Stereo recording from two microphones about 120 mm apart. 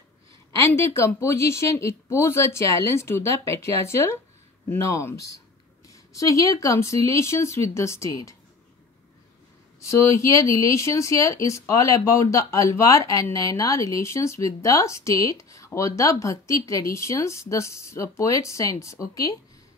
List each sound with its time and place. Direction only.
0.7 s speech: 25° left (ahead or behind)
9.8 s speech: 25° left (ahead or behind)